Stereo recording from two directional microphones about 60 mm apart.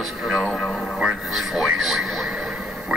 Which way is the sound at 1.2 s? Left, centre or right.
Centre.